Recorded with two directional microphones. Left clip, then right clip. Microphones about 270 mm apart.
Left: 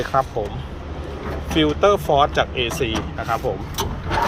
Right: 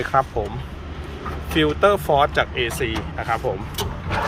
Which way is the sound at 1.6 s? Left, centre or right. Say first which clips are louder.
Even; right.